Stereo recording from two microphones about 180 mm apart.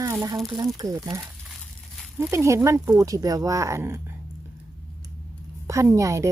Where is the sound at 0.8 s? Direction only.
20° right (ahead or behind).